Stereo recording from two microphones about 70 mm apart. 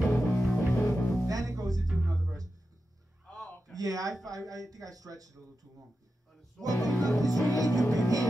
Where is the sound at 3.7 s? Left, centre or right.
Right.